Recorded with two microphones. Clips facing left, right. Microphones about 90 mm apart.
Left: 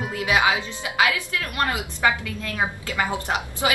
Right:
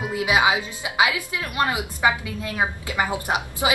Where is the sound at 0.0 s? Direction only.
15° right (ahead or behind).